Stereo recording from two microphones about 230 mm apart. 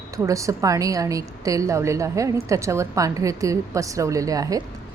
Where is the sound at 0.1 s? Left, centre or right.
Centre.